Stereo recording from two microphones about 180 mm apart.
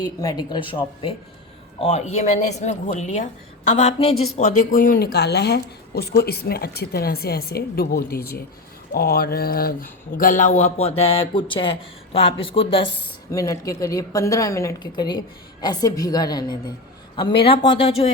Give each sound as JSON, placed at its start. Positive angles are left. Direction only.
{"t": 0.2, "sound": "a woman's voice", "side_deg": 20}
{"t": 13.3, "sound": "a woman's voice", "side_deg": 20}